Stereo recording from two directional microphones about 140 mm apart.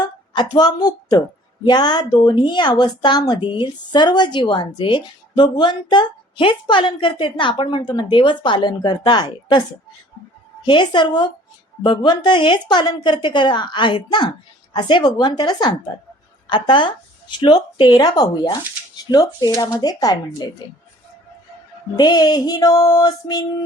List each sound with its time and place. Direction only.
0.0 s a woman's voice: 30° left (ahead or behind)
19.1 s music: 30° left (ahead or behind)
21.9 s music: 30° left (ahead or behind)